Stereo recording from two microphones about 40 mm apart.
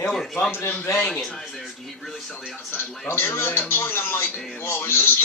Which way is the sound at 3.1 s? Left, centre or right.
Left.